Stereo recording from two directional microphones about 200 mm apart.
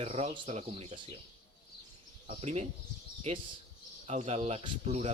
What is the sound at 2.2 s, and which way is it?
Speech, 35° right (ahead or behind).